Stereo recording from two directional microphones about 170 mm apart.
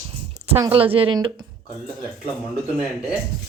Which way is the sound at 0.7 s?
35° right (ahead or behind).